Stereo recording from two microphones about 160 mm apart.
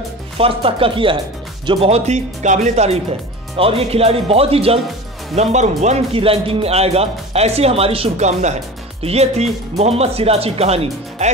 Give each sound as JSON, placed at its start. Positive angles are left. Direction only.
{"t": 0.4, "sound": "speech", "side_deg": -35}